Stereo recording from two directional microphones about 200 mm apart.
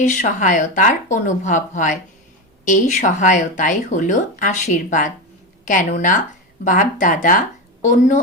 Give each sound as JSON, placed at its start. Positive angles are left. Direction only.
{"t": 0.0, "sound": "speech", "side_deg": 40}